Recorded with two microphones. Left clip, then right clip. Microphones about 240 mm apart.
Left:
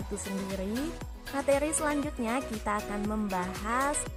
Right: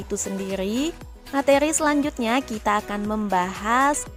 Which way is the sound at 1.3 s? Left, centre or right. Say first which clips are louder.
Right 9 dB; right.